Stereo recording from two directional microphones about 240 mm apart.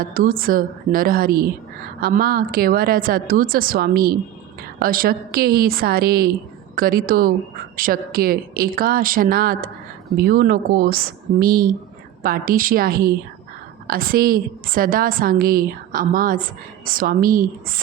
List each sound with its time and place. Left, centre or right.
0.0 s a woman's voice: right